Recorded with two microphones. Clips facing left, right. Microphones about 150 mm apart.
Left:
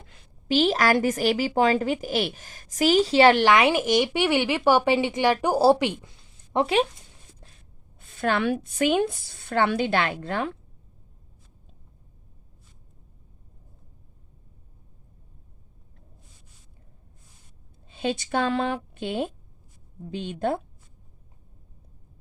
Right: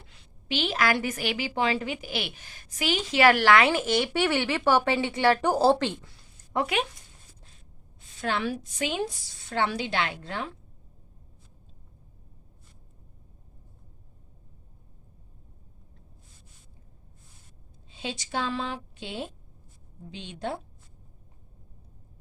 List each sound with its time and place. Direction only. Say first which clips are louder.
0.0 s a woman's voice: left 2 dB; 45° left (ahead or behind); by 6.8 s 25° left (ahead or behind)
7.9 s a woman's voice: left 5 dB; 55° left (ahead or behind)
17.8 s speech: left 8 dB; 55° left (ahead or behind)